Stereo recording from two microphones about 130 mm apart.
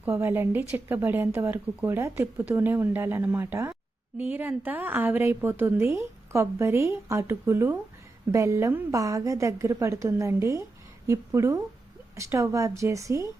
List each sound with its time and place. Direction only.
0.0 s a woman's voice: 15° right (ahead or behind)